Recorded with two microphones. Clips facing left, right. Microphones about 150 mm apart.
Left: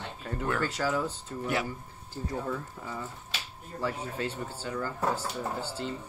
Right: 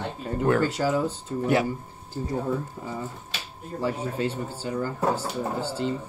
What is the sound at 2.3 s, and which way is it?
Speech, 25° right (ahead or behind).